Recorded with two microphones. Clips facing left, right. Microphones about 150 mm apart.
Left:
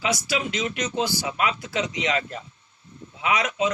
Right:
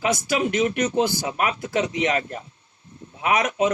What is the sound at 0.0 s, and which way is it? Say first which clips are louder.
A man's voice: right 4 dB; 50° right (ahead or behind).